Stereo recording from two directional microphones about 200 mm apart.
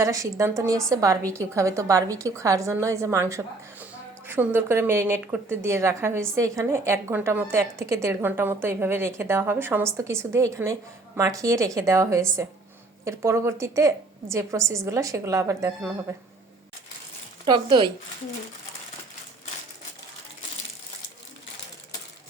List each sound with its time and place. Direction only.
0.0 s a woman's voice: 15° right (ahead or behind)
17.4 s a woman's voice: 20° right (ahead or behind)